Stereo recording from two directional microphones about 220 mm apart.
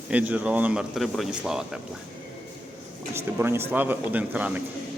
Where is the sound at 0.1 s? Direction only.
5° right (ahead or behind).